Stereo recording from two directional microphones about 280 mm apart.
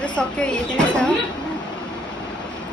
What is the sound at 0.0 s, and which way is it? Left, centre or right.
Speech, centre.